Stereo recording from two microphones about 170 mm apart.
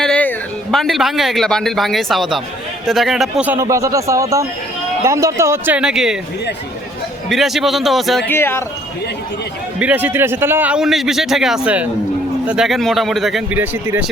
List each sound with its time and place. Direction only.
0.0 s a man's voice: 5° left (ahead or behind)
7.3 s a man's voice: centre (ahead or behind)
8.3 s speech: 15° left (ahead or behind)
9.7 s a man's voice: 10° right (ahead or behind)
13.6 s a man's voice: 10° right (ahead or behind)